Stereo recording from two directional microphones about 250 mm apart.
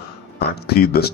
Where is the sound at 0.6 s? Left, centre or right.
Left.